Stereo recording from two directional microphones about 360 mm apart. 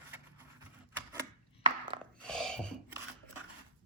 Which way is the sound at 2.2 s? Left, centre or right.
Centre.